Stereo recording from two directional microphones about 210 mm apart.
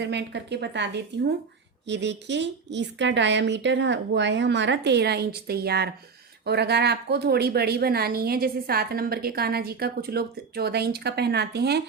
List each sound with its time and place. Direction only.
0.0 s a woman's voice: 55° right (ahead or behind)